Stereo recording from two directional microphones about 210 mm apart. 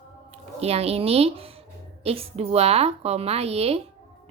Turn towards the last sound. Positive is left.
turn(degrees=-30)  # may be behind; listen again after turning